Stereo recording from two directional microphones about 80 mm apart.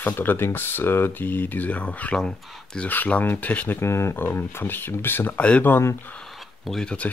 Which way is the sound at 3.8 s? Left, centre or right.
Left.